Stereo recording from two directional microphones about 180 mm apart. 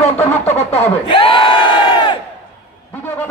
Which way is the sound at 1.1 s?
30° left (ahead or behind).